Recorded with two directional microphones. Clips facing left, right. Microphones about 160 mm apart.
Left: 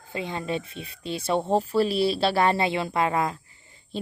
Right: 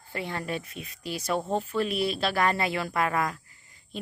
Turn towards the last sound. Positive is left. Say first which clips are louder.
# left 5 dB
turn(degrees=30)  # may be behind; listen again after turning